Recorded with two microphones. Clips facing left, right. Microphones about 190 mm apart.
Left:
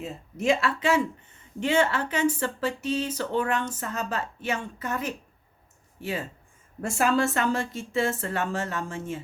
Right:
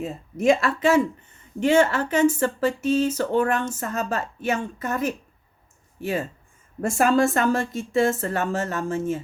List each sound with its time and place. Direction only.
0.0 s speech: 50° right (ahead or behind)